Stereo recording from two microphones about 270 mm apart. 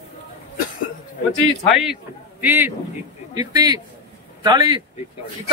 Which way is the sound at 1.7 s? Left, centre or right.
Centre.